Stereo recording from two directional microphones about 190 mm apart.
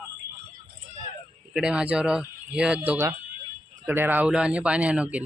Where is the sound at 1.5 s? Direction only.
5° right (ahead or behind).